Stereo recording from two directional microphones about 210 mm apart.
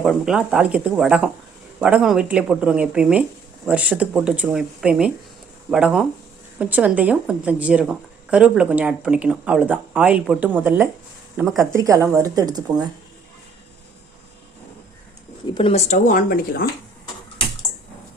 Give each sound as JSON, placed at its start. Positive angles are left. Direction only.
{"t": 0.0, "sound": "speech", "side_deg": 0}
{"t": 11.7, "sound": "speech", "side_deg": -15}
{"t": 15.5, "sound": "speech", "side_deg": 25}